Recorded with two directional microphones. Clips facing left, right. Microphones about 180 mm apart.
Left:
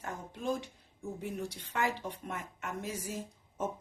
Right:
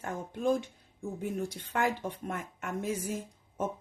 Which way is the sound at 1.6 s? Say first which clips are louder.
Right 3 dB; 55° right (ahead or behind).